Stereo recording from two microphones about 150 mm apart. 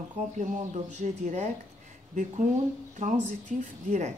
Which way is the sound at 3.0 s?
60° right (ahead or behind).